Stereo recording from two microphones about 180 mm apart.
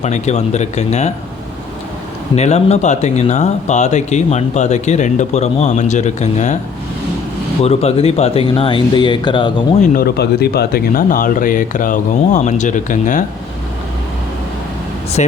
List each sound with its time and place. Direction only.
0.0 s speech: 40° left (ahead or behind)
2.3 s speech: 40° left (ahead or behind)
7.6 s speech: 35° left (ahead or behind)
9.8 s speech: 50° left (ahead or behind)
15.2 s speech: 40° left (ahead or behind)